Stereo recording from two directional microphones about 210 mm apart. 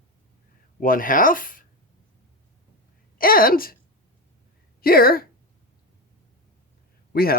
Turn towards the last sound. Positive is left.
turn(degrees=45)  # may be behind; listen again after turning